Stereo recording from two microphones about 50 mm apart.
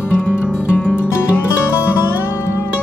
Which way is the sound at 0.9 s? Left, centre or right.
Left.